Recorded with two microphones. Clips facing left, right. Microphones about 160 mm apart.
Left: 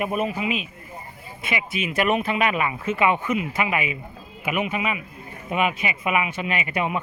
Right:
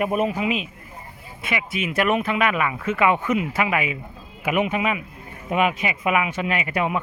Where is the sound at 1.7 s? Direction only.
25° left (ahead or behind).